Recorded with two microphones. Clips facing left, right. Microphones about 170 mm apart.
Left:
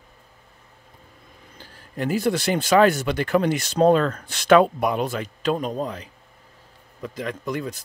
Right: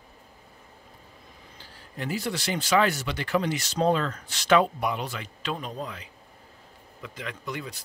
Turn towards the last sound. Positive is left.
turn(degrees=45)  # may be behind; listen again after turning